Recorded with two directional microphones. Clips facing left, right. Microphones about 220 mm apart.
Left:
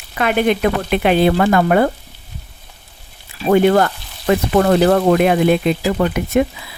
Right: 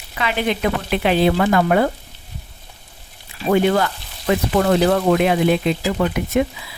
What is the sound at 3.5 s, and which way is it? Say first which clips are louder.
Speech: left 4 dB; 50° left (ahead or behind).